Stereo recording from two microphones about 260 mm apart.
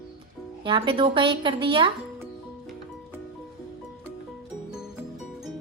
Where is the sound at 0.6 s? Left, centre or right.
Centre.